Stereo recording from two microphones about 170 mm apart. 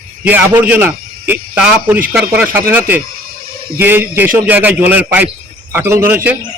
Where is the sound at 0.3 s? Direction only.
10° right (ahead or behind).